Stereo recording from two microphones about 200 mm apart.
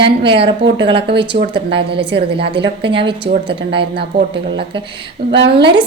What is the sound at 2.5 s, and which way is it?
Speech, 25° right (ahead or behind).